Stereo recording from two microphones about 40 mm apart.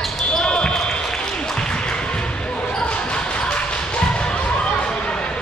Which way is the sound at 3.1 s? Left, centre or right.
Left.